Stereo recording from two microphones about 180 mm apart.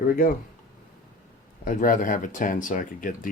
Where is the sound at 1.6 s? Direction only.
50° left (ahead or behind).